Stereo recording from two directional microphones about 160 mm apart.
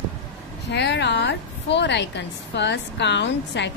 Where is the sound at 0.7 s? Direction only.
90° left.